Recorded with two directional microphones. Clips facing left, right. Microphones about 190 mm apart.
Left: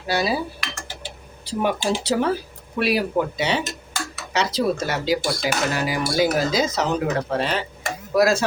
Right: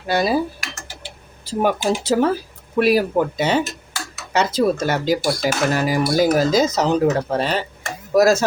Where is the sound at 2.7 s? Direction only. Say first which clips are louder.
Right 5 dB; 45° right (ahead or behind).